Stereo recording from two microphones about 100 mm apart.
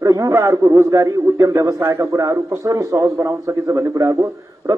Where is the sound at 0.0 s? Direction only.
35° right (ahead or behind).